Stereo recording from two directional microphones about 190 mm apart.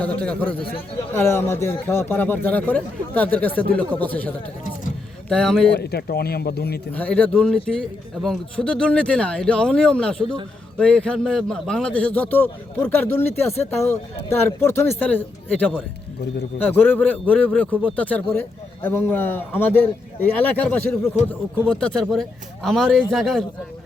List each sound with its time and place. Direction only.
0.0 s a man's voice: 5° left (ahead or behind)
5.7 s speech: 60° left (ahead or behind)
6.9 s a man's voice: 5° left (ahead or behind)